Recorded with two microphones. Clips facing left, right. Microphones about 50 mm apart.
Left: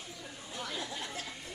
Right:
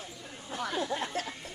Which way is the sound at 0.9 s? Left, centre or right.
Right.